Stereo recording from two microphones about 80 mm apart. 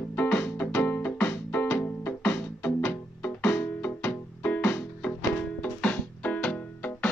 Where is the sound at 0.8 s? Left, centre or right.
Left.